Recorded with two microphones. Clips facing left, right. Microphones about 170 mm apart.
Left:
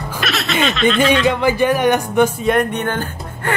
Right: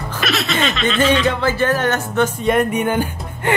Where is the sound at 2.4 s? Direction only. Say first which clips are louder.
Even; centre (ahead or behind).